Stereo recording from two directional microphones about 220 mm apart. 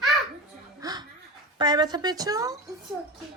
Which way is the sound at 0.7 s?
15° right (ahead or behind).